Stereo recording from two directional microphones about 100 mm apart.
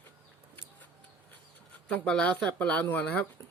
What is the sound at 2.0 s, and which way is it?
Speech, 10° left (ahead or behind).